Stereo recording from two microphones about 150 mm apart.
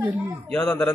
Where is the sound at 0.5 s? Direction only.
5° left (ahead or behind).